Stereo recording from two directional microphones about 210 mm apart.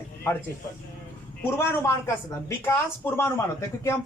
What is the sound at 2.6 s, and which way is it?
Speech, 10° left (ahead or behind).